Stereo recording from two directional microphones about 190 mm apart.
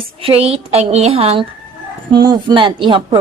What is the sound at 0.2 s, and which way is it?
A woman's voice, 30° right (ahead or behind).